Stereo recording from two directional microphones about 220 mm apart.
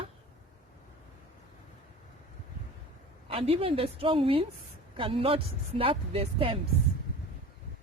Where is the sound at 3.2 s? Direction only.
25° right (ahead or behind).